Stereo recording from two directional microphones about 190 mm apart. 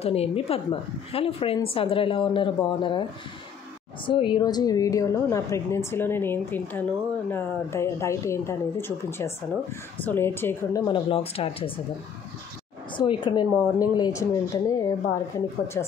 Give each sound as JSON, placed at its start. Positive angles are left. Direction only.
{"t": 0.0, "sound": "a woman's voice", "side_deg": 30}
{"t": 10.9, "sound": "a woman's voice", "side_deg": 30}
{"t": 12.9, "sound": "a woman's voice", "side_deg": 25}